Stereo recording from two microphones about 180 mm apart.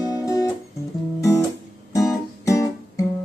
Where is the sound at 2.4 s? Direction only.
15° left (ahead or behind).